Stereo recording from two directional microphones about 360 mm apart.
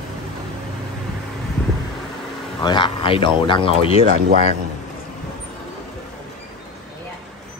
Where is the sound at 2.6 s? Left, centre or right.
Centre.